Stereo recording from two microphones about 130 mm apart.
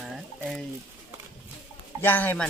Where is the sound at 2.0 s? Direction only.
15° left (ahead or behind).